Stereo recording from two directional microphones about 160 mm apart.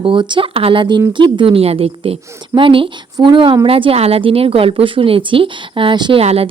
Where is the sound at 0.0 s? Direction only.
30° right (ahead or behind).